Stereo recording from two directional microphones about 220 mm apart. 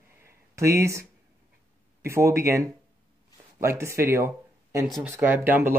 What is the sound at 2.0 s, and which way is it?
Speech, 15° right (ahead or behind).